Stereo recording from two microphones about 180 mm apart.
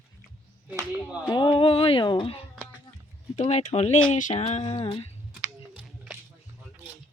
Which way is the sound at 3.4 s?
40° left (ahead or behind).